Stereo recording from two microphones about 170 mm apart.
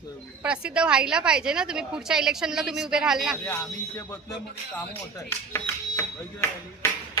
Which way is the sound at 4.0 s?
20° left (ahead or behind).